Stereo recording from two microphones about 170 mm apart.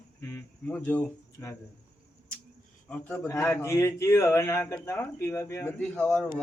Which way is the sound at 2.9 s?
10° left (ahead or behind).